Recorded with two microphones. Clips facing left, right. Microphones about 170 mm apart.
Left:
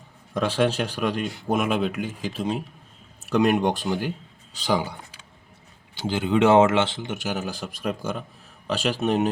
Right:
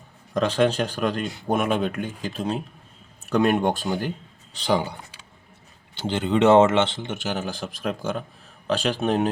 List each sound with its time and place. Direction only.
0.3 s speech: 10° left (ahead or behind)